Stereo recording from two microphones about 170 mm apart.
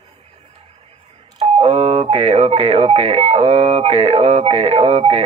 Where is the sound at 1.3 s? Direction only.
40° right (ahead or behind).